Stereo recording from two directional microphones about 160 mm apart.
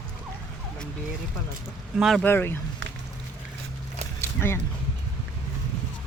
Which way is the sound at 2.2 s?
15° left (ahead or behind).